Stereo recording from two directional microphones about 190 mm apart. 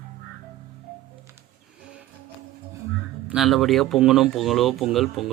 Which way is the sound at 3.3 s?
Centre (ahead or behind).